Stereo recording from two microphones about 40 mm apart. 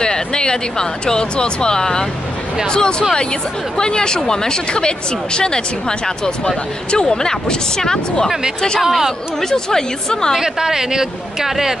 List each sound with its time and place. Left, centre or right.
0.0 s speech: centre
8.8 s speech: centre
9.4 s speech: centre
10.4 s speech: centre